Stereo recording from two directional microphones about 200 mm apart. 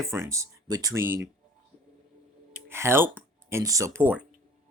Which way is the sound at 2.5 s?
10° right (ahead or behind).